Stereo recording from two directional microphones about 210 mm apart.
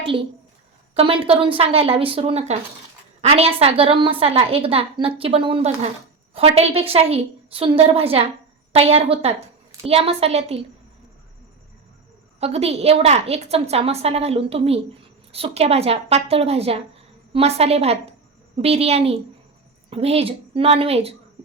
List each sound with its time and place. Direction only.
0.0 s a woman's voice: 25° right (ahead or behind)
12.4 s a woman's voice: 30° right (ahead or behind)